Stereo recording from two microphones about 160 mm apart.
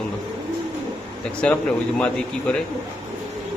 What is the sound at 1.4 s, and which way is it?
Speech, 10° left (ahead or behind).